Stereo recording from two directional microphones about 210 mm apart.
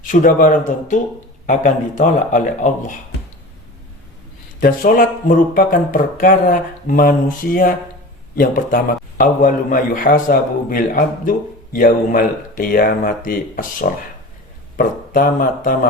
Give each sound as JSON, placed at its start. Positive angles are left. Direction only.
{"t": 0.1, "sound": "a man's voice", "side_deg": 40}
{"t": 4.6, "sound": "a man's voice", "side_deg": 40}